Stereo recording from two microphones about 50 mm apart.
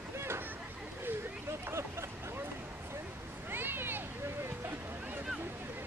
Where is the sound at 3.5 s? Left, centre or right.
Right.